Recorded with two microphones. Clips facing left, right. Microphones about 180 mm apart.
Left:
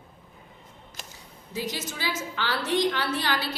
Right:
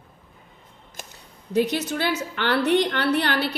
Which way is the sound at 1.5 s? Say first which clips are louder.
Right 11 dB; 65° right (ahead or behind).